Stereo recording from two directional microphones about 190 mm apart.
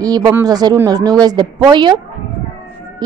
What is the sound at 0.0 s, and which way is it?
A woman's voice, 20° right (ahead or behind).